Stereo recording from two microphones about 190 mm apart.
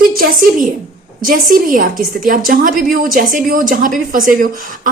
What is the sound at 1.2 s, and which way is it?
A woman's voice, 50° right (ahead or behind).